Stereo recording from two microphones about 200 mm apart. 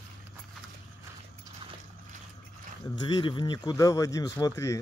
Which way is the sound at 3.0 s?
25° left (ahead or behind).